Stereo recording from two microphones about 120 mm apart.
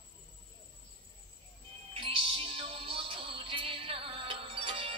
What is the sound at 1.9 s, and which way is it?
Music, 50° right (ahead or behind).